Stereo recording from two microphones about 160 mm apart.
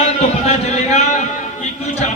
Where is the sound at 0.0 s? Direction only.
40° left (ahead or behind).